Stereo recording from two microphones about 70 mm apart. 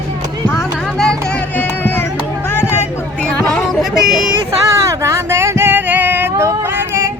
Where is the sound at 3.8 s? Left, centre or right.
Centre.